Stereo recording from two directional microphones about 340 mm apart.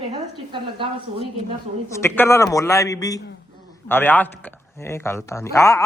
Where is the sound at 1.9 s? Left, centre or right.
Centre.